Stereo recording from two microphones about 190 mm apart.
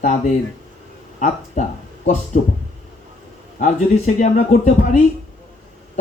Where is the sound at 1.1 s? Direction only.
40° left (ahead or behind).